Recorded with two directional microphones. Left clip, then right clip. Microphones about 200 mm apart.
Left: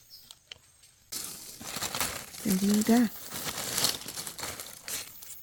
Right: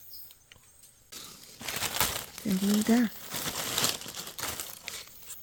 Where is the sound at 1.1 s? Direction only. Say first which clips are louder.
Left 5 dB; 50° left (ahead or behind).